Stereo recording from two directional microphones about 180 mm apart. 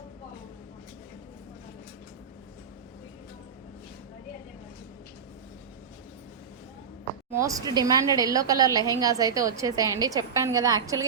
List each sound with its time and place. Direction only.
7.4 s a woman's voice: 20° right (ahead or behind)